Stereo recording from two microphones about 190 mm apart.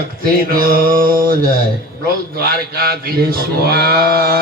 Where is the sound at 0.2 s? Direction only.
50° right (ahead or behind).